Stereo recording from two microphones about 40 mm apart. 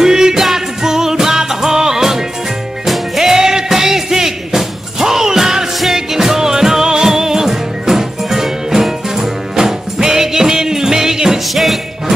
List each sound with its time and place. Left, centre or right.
0.0 s music: centre
11.5 s jingle bell: centre